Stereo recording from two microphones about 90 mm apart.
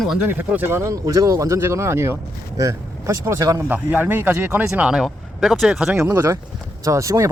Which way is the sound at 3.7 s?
20° right (ahead or behind).